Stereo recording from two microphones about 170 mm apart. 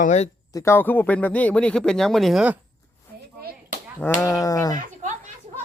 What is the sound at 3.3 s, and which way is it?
Chop, 65° right (ahead or behind).